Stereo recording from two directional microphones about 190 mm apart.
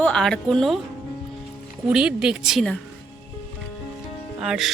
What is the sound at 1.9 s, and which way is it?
Speech, 5° right (ahead or behind).